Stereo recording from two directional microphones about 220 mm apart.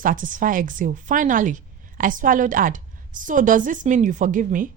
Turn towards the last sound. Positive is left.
turn(degrees=-35)  # may be behind; listen again after turning